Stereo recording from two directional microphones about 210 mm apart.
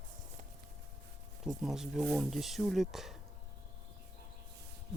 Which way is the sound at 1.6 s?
Centre (ahead or behind).